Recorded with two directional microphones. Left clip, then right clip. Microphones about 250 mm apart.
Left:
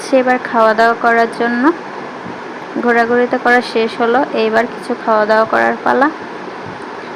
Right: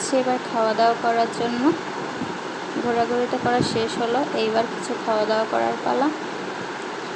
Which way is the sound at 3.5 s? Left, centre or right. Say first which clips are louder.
Left 9 dB; left.